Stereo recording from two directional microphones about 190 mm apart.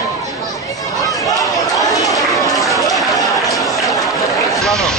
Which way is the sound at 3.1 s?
15° left (ahead or behind).